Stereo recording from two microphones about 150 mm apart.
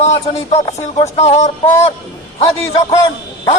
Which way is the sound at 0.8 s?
45° left (ahead or behind).